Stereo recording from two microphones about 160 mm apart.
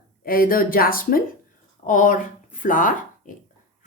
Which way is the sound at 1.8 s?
55° left (ahead or behind).